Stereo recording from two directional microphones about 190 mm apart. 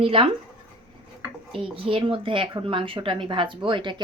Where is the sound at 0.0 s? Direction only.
30° right (ahead or behind).